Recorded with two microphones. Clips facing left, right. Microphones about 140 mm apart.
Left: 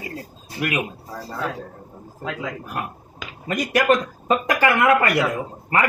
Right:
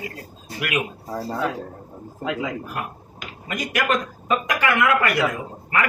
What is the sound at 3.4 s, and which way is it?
Speech, 35° left (ahead or behind).